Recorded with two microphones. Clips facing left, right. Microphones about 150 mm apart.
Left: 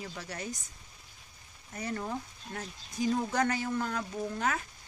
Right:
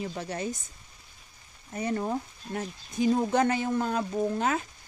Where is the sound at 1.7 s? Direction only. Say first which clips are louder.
Right 6 dB; 25° right (ahead or behind).